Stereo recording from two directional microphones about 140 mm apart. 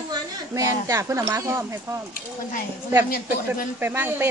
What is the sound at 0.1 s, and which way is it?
Speech, 25° right (ahead or behind).